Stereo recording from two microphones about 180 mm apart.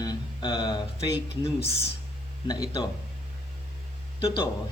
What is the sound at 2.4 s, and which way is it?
Speech, 20° left (ahead or behind).